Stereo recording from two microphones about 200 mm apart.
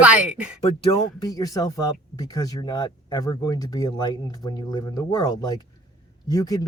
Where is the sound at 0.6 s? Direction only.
25° left (ahead or behind).